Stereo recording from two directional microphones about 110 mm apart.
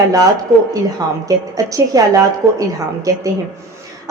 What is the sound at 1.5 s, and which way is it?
Speech, 30° right (ahead or behind).